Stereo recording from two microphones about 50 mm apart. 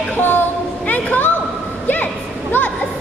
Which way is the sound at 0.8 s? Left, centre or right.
Left.